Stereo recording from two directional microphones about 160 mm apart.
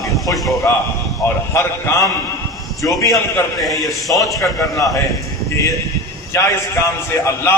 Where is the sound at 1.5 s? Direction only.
15° left (ahead or behind).